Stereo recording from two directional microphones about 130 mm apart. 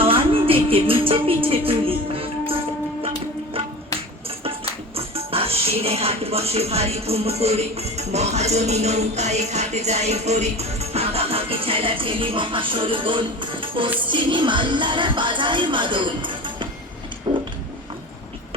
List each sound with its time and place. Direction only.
0.0 s music: 45° right (ahead or behind)
4.4 s speech: 45° right (ahead or behind)
14.0 s music: 40° right (ahead or behind)
17.3 s a sound: 35° right (ahead or behind)